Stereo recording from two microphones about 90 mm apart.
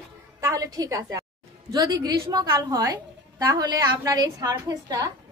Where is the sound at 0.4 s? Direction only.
40° right (ahead or behind).